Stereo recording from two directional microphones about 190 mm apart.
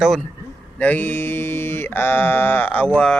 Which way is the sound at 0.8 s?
10° left (ahead or behind).